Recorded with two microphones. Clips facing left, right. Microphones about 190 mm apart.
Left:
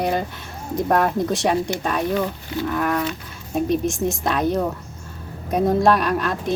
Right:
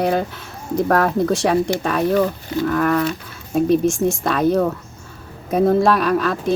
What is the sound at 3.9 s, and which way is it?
Speech, 20° left (ahead or behind).